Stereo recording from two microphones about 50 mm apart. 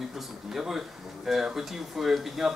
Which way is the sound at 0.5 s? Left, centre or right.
Centre.